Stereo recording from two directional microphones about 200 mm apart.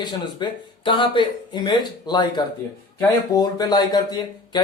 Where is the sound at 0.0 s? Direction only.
20° left (ahead or behind).